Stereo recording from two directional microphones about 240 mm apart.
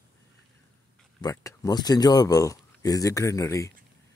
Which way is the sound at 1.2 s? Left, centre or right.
Centre.